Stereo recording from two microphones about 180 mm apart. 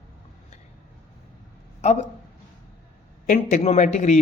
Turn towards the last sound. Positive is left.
turn(degrees=40)  # may be behind; listen again after turning